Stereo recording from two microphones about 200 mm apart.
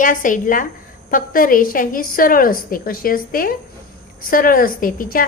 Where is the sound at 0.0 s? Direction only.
40° left (ahead or behind).